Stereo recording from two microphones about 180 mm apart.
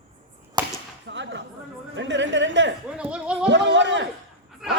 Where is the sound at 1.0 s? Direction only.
80° right.